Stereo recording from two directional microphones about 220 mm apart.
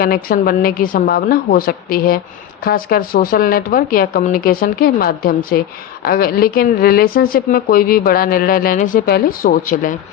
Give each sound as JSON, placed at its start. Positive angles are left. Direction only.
{"t": 0.0, "sound": "speech", "side_deg": 40}